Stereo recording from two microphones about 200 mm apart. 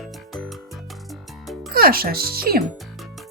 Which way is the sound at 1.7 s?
50° right (ahead or behind).